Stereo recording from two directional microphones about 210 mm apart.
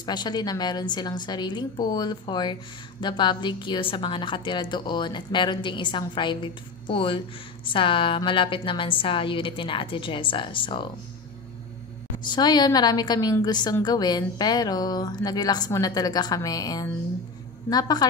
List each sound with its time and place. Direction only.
0.0 s a woman's voice: 20° left (ahead or behind)
12.3 s a woman's voice: 20° left (ahead or behind)